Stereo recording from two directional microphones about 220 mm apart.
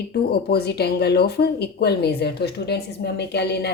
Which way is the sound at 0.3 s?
45° left (ahead or behind).